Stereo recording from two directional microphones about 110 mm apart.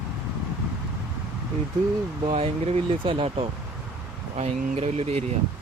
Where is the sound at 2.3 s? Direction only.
70° right (ahead or behind).